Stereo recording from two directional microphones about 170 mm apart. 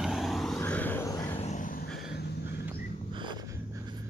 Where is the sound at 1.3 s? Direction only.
45° left (ahead or behind).